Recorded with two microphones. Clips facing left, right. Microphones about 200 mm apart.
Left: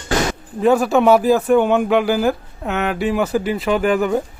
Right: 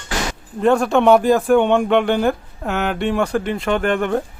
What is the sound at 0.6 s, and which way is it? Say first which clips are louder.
A man's voice: left 1 dB; 5° left (ahead or behind).